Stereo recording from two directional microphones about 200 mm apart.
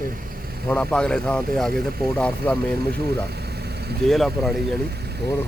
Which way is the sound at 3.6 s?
55° right (ahead or behind).